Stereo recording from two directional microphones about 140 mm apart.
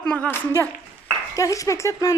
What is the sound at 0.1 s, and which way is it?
Speech, 15° left (ahead or behind).